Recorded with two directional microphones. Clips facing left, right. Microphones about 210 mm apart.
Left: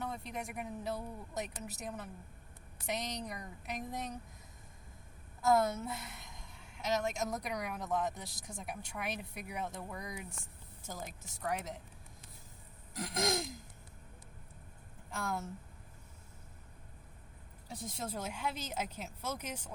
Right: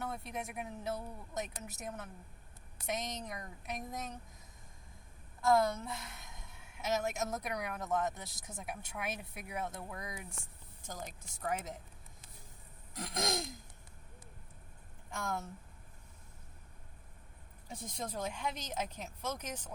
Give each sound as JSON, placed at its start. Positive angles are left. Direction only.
{"t": 0.0, "sound": "speech", "side_deg": -5}
{"t": 5.5, "sound": "speech", "side_deg": 5}
{"t": 13.0, "sound": "speech", "side_deg": 0}
{"t": 15.1, "sound": "speech", "side_deg": 0}
{"t": 17.7, "sound": "speech", "side_deg": 0}